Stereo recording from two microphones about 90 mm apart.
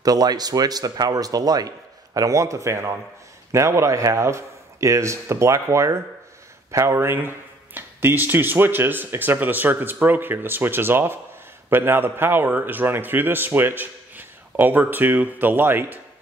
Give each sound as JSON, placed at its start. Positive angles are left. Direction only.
{"t": 0.0, "sound": "a man's voice", "side_deg": -45}